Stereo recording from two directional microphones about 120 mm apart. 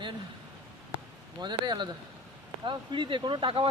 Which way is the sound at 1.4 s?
35° right (ahead or behind).